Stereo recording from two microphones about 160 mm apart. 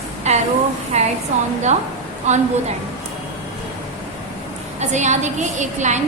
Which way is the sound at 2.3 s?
45° right (ahead or behind).